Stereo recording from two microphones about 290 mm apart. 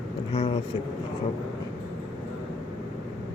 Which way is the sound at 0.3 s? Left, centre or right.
Centre.